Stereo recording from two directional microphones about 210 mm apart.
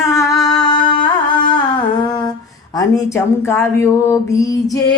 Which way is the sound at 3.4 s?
10° left (ahead or behind).